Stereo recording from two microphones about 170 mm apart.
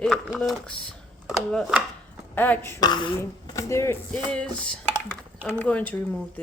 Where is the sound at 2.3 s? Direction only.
10° left (ahead or behind).